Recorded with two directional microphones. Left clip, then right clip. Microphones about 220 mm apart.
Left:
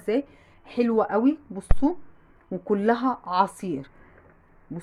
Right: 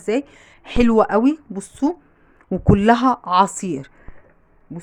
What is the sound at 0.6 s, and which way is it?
Speech, 35° right (ahead or behind).